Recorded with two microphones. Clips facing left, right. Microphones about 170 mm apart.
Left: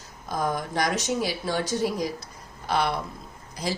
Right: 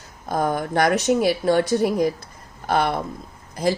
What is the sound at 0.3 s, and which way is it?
A woman's voice, 55° right (ahead or behind).